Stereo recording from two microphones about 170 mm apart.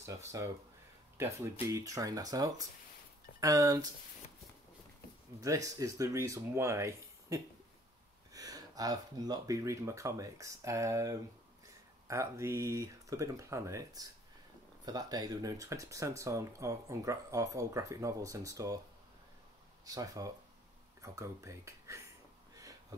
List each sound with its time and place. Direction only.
0.3 s speech: 20° right (ahead or behind)
5.4 s speech: 20° right (ahead or behind)
19.8 s speech: 20° right (ahead or behind)